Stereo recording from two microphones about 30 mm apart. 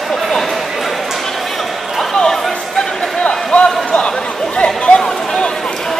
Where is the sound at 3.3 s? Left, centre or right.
Left.